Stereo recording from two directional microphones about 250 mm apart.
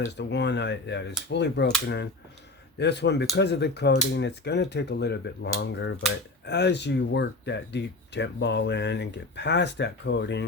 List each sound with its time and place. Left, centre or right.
0.0 s speech: left
2.7 s speech: left